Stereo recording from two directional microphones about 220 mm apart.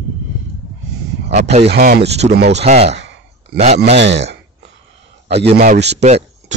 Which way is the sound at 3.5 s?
30° right (ahead or behind).